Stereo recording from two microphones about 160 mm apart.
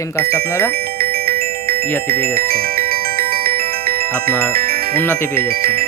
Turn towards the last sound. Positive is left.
turn(degrees=-65)  # may be behind; listen again after turning